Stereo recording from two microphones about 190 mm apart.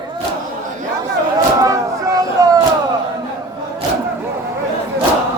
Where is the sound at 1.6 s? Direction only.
20° right (ahead or behind).